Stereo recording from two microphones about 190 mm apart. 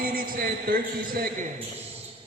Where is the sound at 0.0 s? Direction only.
50° right (ahead or behind).